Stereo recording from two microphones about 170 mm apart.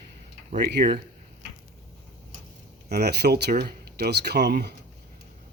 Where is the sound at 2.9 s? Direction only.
70° right (ahead or behind).